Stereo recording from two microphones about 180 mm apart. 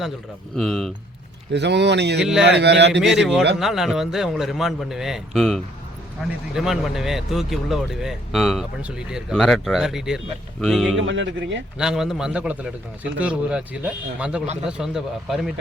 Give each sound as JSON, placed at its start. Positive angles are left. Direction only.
{"t": 0.5, "sound": "speech", "side_deg": 0}
{"t": 1.5, "sound": "speech", "side_deg": -70}
{"t": 3.0, "sound": "speech", "side_deg": 0}
{"t": 10.9, "sound": "speech", "side_deg": -90}
{"t": 11.8, "sound": "speech", "side_deg": -5}